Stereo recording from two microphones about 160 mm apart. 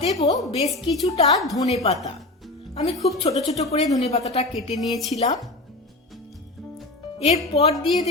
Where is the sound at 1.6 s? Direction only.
40° left (ahead or behind).